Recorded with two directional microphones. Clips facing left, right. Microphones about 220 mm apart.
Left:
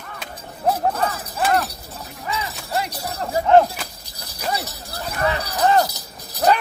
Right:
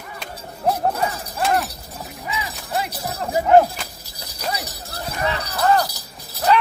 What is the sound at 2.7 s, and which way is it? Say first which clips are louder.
Jingle bell: even; 5° right (ahead or behind).